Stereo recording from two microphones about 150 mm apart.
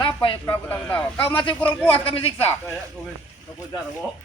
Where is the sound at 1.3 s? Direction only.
35° left (ahead or behind).